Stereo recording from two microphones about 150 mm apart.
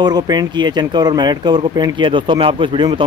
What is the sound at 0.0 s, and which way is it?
Speech, 25° right (ahead or behind).